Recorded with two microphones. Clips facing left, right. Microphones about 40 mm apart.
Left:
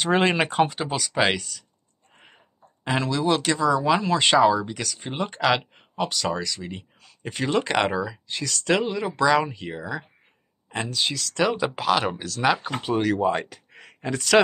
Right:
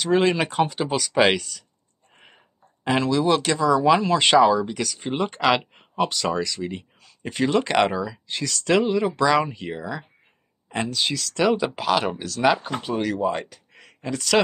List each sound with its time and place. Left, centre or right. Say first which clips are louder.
0.0 s speech: right 1 dB; left
0.4 s speech: left 1 dB; centre
0.7 s speech: right 3 dB; centre
13.7 s a sound: left 1 dB; centre